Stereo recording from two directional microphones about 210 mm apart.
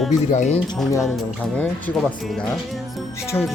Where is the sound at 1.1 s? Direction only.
5° left (ahead or behind).